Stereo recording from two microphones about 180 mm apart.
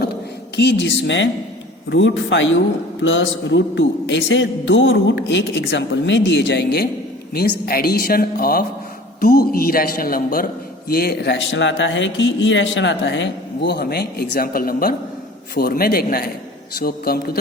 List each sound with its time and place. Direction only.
0.5 s a man's voice: 70° left (ahead or behind)